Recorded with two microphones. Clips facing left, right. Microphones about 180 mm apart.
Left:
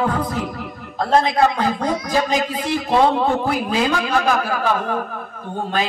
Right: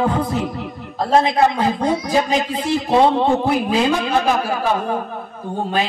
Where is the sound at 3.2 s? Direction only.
25° right (ahead or behind).